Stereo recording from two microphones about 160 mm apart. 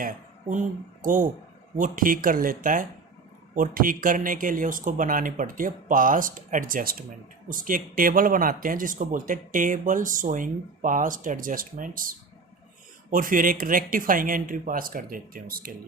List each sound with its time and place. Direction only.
0.0 s speech: 50° right (ahead or behind)